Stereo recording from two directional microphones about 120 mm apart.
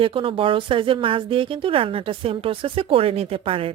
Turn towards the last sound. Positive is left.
turn(degrees=-50)  # may be behind; listen again after turning